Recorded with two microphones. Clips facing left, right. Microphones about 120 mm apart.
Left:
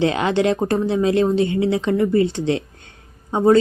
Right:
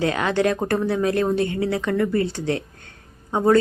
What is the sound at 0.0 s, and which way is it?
Speech, 25° left (ahead or behind).